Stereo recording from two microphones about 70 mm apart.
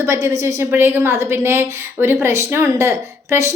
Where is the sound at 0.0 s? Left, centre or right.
Right.